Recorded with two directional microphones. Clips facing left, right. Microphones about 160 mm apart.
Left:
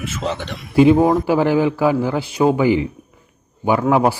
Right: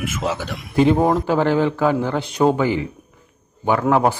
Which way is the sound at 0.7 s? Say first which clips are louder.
Left 4 dB; 10° left (ahead or behind).